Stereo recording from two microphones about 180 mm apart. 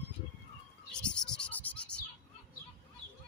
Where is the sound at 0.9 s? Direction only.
5° left (ahead or behind).